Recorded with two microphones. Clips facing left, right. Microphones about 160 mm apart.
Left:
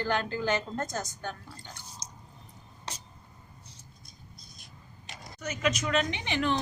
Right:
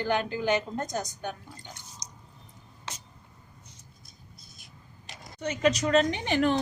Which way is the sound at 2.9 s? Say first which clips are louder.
Even; 35° left (ahead or behind).